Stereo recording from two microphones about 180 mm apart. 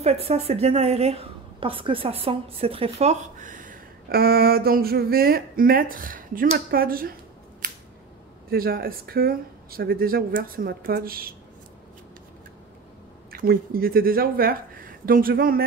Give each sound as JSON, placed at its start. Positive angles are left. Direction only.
{"t": 0.0, "sound": "a woman's voice", "side_deg": -35}
{"t": 7.6, "sound": "scissors", "side_deg": -50}
{"t": 8.5, "sound": "speech", "side_deg": -55}
{"t": 13.3, "sound": "speech", "side_deg": -55}